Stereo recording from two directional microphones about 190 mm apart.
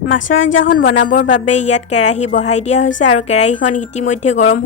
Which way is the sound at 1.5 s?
35° left (ahead or behind).